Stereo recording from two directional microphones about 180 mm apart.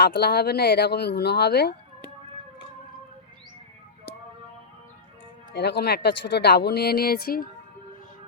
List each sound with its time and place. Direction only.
0.0 s speech: 65° left (ahead or behind)
5.5 s speech: 70° left (ahead or behind)